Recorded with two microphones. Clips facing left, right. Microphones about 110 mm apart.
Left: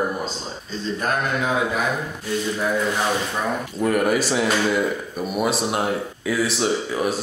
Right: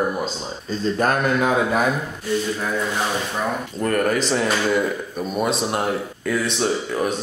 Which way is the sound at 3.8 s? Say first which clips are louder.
Left 1 dB; 5° left (ahead or behind).